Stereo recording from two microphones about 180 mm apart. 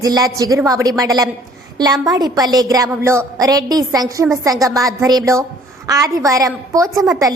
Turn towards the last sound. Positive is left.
turn(degrees=-20)  # may be behind; listen again after turning